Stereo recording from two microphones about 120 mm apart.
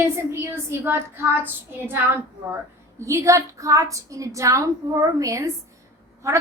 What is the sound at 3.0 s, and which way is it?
A woman's voice, 25° right (ahead or behind).